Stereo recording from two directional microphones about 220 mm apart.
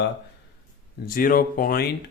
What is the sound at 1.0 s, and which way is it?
Speech, 40° left (ahead or behind).